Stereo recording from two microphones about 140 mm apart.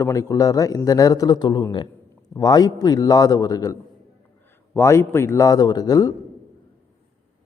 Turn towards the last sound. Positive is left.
turn(degrees=25)  # may be behind; listen again after turning